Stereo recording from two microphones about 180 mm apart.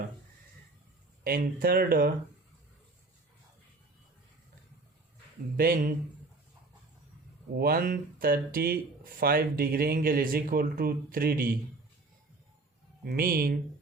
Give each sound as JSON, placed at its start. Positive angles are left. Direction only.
{"t": 1.2, "sound": "speech", "side_deg": -50}
{"t": 5.5, "sound": "speech", "side_deg": -50}
{"t": 7.6, "sound": "speech", "side_deg": -55}
{"t": 13.1, "sound": "speech", "side_deg": -55}